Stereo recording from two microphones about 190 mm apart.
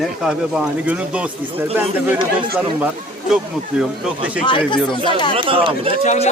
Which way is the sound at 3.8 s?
5° right (ahead or behind).